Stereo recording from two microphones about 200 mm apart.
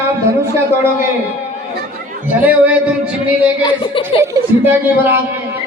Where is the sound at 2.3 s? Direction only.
5° right (ahead or behind).